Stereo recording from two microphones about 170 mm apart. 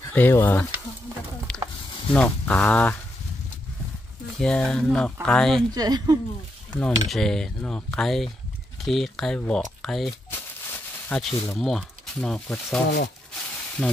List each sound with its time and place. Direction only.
0.0 s speech: 15° left (ahead or behind)
1.5 s a sound: 5° left (ahead or behind)
2.1 s speech: 10° left (ahead or behind)
4.4 s speech: 5° left (ahead or behind)
5.7 s speech: 25° right (ahead or behind)
6.7 s speech: 5° left (ahead or behind)